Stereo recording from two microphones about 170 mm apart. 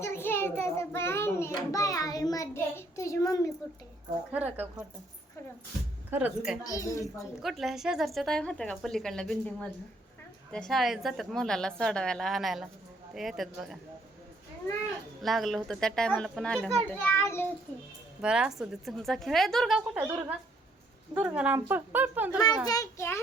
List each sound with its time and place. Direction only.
0.0 s child singing: 15° left (ahead or behind)
1.5 s a child's voice: 20° left (ahead or behind)
4.3 s speech: 10° right (ahead or behind)
6.1 s speech: 10° right (ahead or behind)
6.7 s a woman's voice: 20° left (ahead or behind)
7.4 s a woman's voice: centre (ahead or behind)
15.2 s a woman's voice: centre (ahead or behind)
18.2 s a woman's voice: 5° right (ahead or behind)
21.3 s speech: 10° right (ahead or behind)
22.4 s a child's voice: 20° left (ahead or behind)